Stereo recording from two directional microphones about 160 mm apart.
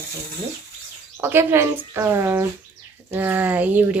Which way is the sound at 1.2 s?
15° right (ahead or behind).